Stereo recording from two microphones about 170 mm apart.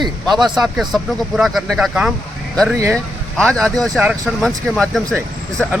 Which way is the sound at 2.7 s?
15° right (ahead or behind).